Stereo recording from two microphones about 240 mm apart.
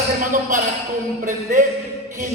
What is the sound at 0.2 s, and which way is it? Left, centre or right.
A man's voice, right.